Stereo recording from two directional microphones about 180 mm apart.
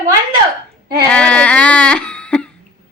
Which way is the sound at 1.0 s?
5° left (ahead or behind).